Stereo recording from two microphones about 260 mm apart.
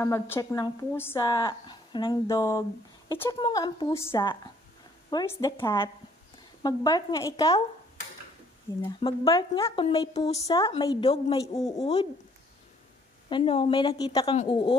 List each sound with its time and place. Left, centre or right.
0.0 s speech: centre
8.8 s speech: centre
11.8 s speech: left
13.3 s speech: left